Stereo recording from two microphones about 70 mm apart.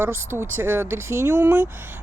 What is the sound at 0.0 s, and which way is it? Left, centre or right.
Speech, right.